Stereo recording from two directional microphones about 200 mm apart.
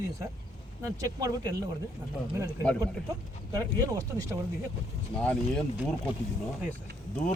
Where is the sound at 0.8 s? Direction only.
15° right (ahead or behind).